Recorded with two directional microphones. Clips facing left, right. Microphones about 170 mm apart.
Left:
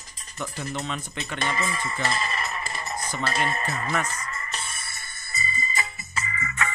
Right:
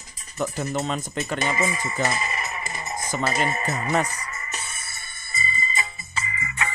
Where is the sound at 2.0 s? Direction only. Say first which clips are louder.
Right 1 dB; 20° right (ahead or behind).